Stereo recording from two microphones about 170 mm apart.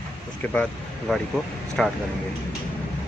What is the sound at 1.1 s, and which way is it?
Speech, 5° left (ahead or behind).